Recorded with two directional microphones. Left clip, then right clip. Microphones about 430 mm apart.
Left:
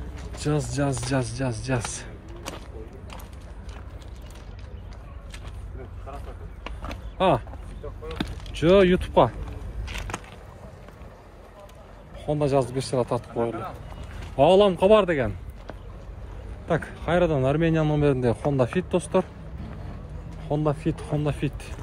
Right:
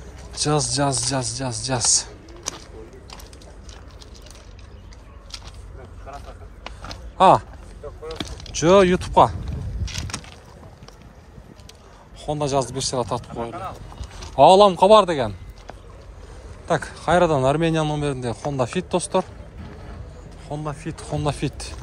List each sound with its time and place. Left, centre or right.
0.4 s speech: centre
6.6 s a sound: centre
8.2 s speech: centre
12.2 s speech: centre
13.5 s a man's voice: centre
20.4 s speech: centre